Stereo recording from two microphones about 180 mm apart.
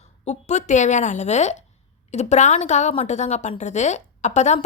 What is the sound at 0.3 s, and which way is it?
A woman's voice, 40° left (ahead or behind).